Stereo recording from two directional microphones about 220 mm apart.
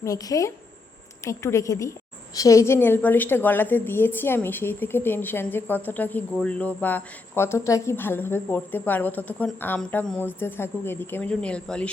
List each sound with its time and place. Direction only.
0.0 s a woman's voice: 15° left (ahead or behind)